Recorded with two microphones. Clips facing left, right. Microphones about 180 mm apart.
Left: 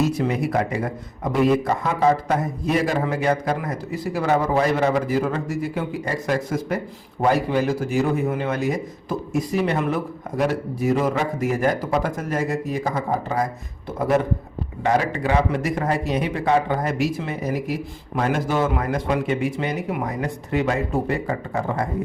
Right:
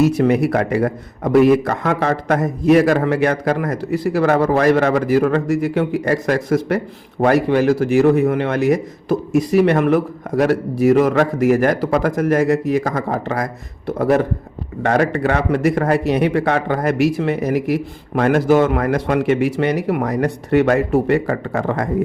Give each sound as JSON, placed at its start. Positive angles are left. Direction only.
{"t": 0.0, "sound": "a man's voice", "side_deg": -70}